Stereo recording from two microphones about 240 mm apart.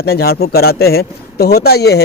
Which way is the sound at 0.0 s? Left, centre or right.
Left.